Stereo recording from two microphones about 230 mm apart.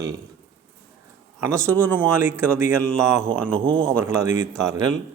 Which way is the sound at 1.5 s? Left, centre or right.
Centre.